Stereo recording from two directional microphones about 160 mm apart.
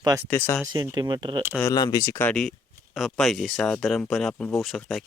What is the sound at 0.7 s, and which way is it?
Speech, 25° right (ahead or behind).